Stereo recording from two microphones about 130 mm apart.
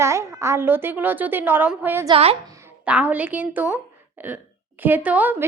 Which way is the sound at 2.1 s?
50° right (ahead or behind).